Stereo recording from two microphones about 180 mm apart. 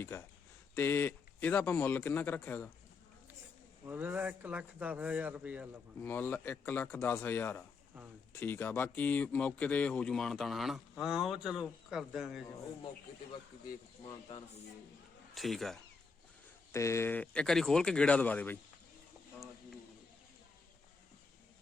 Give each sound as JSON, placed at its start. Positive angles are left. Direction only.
{"t": 0.0, "sound": "speech", "side_deg": 15}
{"t": 3.8, "sound": "speech", "side_deg": -10}
{"t": 6.0, "sound": "speech", "side_deg": 10}
{"t": 14.0, "sound": "speech", "side_deg": 25}
{"t": 15.4, "sound": "speech", "side_deg": 0}
{"t": 16.7, "sound": "speech", "side_deg": 15}